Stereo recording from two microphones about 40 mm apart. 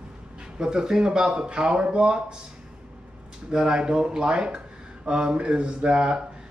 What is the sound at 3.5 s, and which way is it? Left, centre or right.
A man's voice, centre.